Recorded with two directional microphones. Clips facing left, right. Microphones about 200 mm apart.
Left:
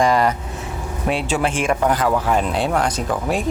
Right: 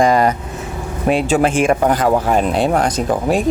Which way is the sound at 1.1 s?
45° right (ahead or behind).